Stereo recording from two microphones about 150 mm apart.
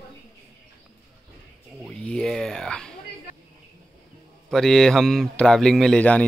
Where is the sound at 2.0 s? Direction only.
5° left (ahead or behind).